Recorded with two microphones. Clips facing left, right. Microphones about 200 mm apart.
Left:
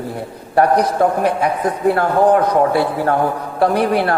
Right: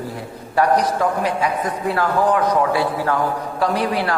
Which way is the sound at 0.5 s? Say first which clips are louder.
Left 3 dB; 60° left (ahead or behind).